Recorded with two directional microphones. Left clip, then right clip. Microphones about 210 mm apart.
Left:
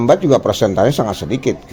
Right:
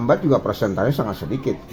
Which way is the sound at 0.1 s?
50° left (ahead or behind).